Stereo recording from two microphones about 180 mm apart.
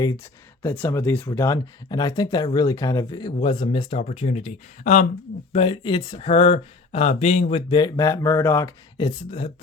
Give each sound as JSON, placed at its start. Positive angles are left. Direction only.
{"t": 0.6, "sound": "speech", "side_deg": 15}
{"t": 5.5, "sound": "speech", "side_deg": 30}
{"t": 9.0, "sound": "speech", "side_deg": 30}